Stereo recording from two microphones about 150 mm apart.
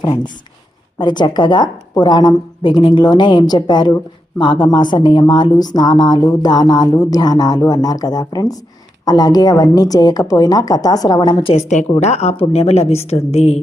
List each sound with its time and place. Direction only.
0.9 s a woman's voice: 30° left (ahead or behind)
11.5 s a woman's voice: 50° left (ahead or behind)